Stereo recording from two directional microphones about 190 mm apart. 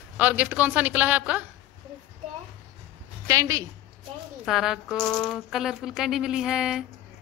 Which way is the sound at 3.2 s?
15° right (ahead or behind).